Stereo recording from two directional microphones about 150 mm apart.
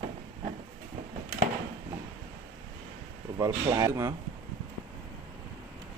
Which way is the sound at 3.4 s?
20° right (ahead or behind).